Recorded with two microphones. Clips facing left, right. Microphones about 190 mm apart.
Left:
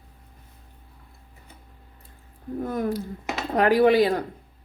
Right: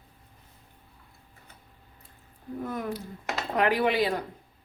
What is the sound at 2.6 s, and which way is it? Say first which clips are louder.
Speech: left 7 dB; 40° left (ahead or behind).